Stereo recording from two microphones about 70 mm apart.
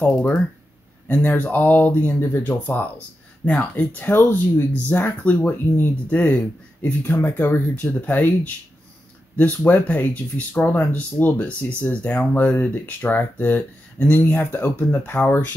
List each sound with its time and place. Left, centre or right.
1.0 s speech: left
9.4 s speech: left